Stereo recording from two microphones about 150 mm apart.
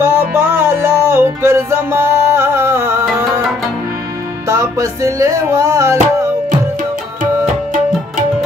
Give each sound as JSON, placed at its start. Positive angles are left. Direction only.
{"t": 0.0, "sound": "music", "side_deg": -15}
{"t": 4.5, "sound": "music", "side_deg": -20}